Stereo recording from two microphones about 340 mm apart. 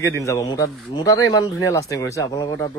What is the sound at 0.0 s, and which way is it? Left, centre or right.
Speech, centre.